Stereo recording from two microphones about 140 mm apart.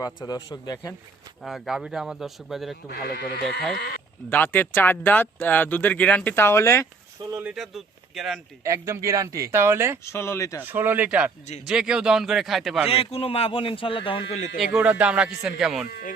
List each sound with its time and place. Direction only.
0.0 s a man's voice: 30° left (ahead or behind)
1.4 s speech: centre (ahead or behind)
4.3 s speech: 15° left (ahead or behind)
7.2 s a sound: 35° right (ahead or behind)
7.5 s speech: centre (ahead or behind)
8.6 s speech: 20° right (ahead or behind)
10.0 s a man's voice: 20° left (ahead or behind)
10.6 s speech: 15° right (ahead or behind)
12.9 s a man's voice: 45° left (ahead or behind)
14.3 s speech: 60° left (ahead or behind)
14.6 s speech: 5° right (ahead or behind)